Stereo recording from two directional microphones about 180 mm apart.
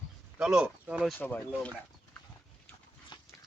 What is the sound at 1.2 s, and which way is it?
Speech, 10° left (ahead or behind).